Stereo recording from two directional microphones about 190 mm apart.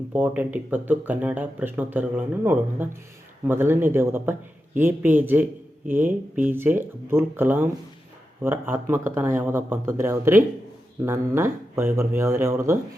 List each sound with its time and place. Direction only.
0.1 s speech: 10° right (ahead or behind)